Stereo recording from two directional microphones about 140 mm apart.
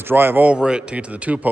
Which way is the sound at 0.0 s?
15° right (ahead or behind).